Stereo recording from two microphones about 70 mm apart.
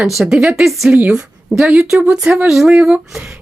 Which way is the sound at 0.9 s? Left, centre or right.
Centre.